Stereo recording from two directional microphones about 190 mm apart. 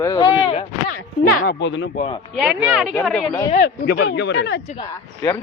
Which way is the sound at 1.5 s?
70° left (ahead or behind).